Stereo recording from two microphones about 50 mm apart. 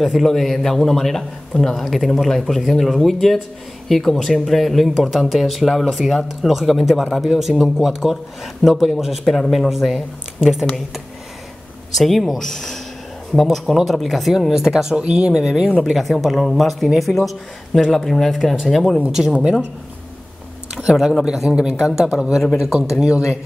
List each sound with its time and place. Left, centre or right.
0.0 s speech: centre
11.9 s speech: centre
15.0 s speech: centre
15.8 s speech: centre
19.3 s speech: right
20.7 s speech: centre